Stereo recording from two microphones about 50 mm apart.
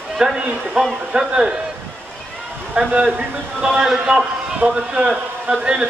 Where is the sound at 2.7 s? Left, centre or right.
Centre.